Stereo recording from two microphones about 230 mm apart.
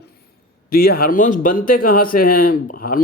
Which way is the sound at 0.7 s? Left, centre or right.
Left.